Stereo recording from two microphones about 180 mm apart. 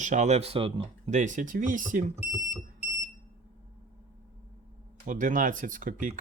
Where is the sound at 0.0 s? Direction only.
40° right (ahead or behind).